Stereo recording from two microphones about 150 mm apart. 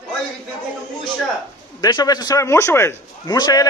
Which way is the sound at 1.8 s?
25° left (ahead or behind).